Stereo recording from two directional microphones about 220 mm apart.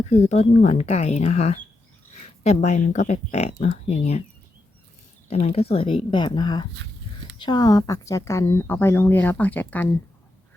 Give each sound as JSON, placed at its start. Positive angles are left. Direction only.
{"t": 0.0, "sound": "speech", "side_deg": 30}
{"t": 5.3, "sound": "speech", "side_deg": 25}